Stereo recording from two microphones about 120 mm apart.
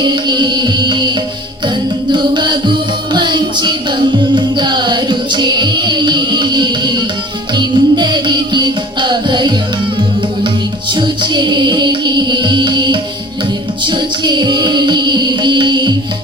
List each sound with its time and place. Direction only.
0.0 s music: 40° right (ahead or behind)
2.1 s music: 40° right (ahead or behind)
10.9 s music: 40° right (ahead or behind)